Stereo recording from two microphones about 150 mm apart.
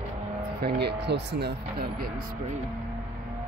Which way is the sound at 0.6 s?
90° right.